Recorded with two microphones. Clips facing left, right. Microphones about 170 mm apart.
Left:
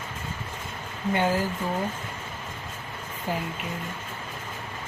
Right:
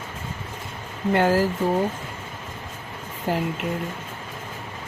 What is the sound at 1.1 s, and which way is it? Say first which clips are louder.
Speech: right 5 dB; 75° right (ahead or behind).